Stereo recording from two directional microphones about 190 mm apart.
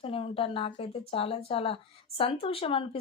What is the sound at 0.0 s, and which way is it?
A woman's voice, 30° left (ahead or behind).